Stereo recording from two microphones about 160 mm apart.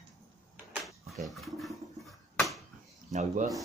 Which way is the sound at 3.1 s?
45° right (ahead or behind).